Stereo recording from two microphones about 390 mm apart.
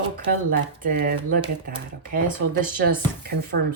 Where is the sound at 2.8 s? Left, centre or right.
Right.